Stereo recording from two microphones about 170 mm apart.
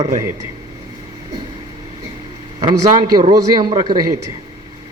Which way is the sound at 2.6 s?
25° right (ahead or behind).